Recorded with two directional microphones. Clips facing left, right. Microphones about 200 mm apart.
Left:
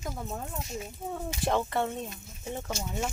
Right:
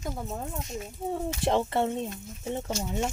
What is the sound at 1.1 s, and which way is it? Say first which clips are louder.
Speech: right 3 dB; 30° right (ahead or behind).